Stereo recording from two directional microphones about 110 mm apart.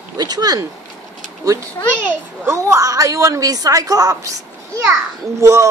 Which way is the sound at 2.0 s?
25° right (ahead or behind).